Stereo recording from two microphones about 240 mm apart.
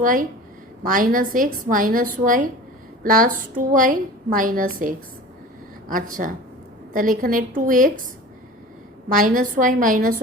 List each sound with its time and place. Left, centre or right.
0.0 s a woman's voice: right
9.1 s a woman's voice: right